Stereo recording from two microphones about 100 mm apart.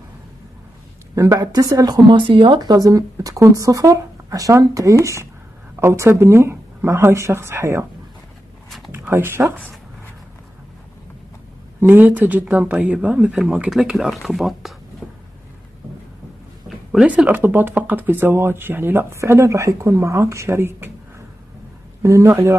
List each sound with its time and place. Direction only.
1.1 s speech: 35° right (ahead or behind)
8.6 s a sound: centre (ahead or behind)
8.9 s speech: 25° right (ahead or behind)
11.8 s speech: 20° right (ahead or behind); by 14.7 s centre (ahead or behind)
16.6 s a sound: centre (ahead or behind)
17.1 s speech: 15° right (ahead or behind)
22.0 s speech: 30° right (ahead or behind)